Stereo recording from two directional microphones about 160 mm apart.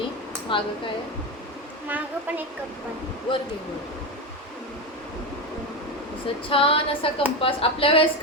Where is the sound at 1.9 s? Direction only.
10° right (ahead or behind).